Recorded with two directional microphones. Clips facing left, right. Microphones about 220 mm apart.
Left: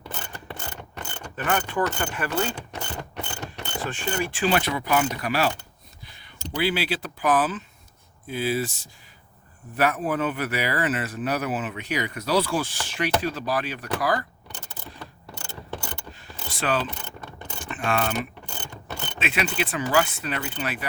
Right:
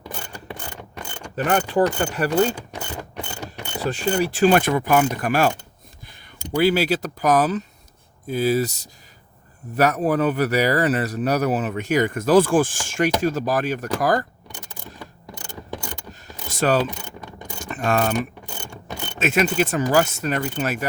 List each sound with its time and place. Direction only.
0.0 s mechanisms: 15° right (ahead or behind)
1.5 s speech: 35° right (ahead or behind)
2.6 s mechanisms: 10° right (ahead or behind)
3.8 s speech: 40° right (ahead or behind)
6.6 s speech: 45° right (ahead or behind)
14.4 s keys jangling: 15° right (ahead or behind)
16.5 s speech: 40° right (ahead or behind)
16.9 s mechanisms: 15° right (ahead or behind)
17.6 s mechanisms: 40° right (ahead or behind)
18.1 s mechanisms: 10° right (ahead or behind)
19.2 s speech: 45° right (ahead or behind)